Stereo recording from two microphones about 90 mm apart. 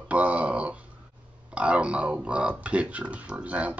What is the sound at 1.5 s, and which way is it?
Speech, 15° right (ahead or behind).